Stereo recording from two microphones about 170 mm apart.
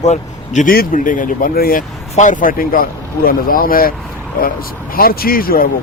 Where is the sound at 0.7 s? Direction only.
55° left (ahead or behind).